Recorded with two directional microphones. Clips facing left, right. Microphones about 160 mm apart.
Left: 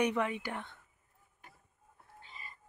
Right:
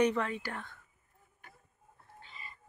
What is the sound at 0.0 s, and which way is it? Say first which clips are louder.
Speech: right 2 dB; 15° left (ahead or behind).